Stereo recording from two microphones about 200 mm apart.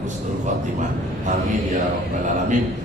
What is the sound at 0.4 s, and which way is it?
Speech, 40° right (ahead or behind).